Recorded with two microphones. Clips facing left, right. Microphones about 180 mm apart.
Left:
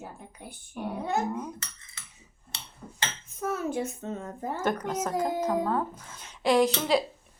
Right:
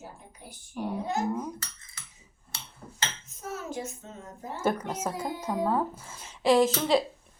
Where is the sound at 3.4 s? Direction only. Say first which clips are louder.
Left 6 dB; 60° left (ahead or behind).